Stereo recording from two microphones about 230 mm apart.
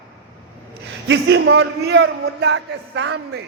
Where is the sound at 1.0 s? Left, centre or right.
Right.